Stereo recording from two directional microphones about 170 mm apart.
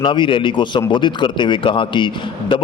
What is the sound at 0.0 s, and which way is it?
A man's voice, 30° left (ahead or behind).